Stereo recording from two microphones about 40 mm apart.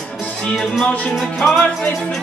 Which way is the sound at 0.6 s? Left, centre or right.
Centre.